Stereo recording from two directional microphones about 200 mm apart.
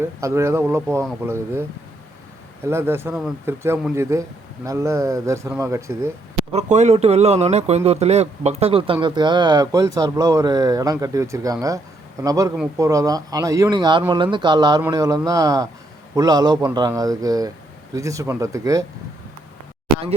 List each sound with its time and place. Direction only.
0.0 s speech: 15° right (ahead or behind)
2.6 s speech: 10° right (ahead or behind)
6.5 s speech: 35° right (ahead or behind); by 18.9 s 15° right (ahead or behind)